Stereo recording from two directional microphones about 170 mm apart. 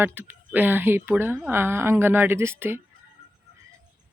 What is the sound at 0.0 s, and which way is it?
Speech, 10° right (ahead or behind).